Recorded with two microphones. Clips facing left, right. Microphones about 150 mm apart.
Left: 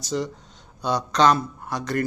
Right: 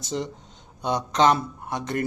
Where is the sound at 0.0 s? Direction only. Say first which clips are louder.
Left 2 dB; 25° right (ahead or behind).